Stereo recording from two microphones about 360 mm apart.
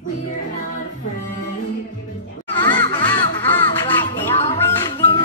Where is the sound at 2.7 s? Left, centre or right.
Centre.